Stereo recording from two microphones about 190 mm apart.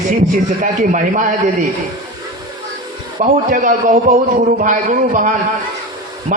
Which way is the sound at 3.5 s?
40° right (ahead or behind).